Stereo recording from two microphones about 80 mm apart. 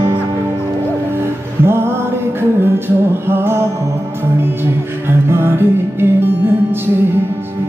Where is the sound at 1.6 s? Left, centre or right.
Right.